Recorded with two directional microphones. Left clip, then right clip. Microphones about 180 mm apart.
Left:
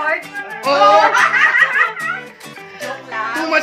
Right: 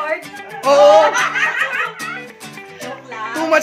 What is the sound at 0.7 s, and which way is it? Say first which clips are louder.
Laughter: right 2 dB; 30° right (ahead or behind).